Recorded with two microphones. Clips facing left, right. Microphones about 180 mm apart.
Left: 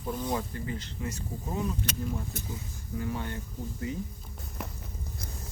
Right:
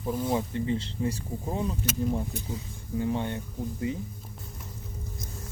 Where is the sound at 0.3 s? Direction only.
25° right (ahead or behind).